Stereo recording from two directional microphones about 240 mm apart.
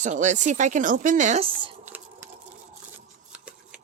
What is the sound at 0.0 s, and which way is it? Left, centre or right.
Speech, right.